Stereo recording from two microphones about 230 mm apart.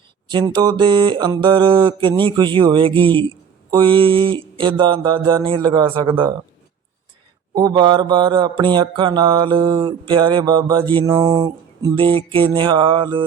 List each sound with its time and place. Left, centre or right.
0.3 s mantra: centre
7.5 s mantra: centre